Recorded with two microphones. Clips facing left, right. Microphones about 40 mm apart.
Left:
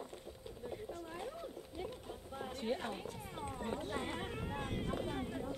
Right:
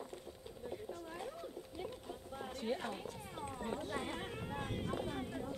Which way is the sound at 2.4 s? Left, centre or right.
Centre.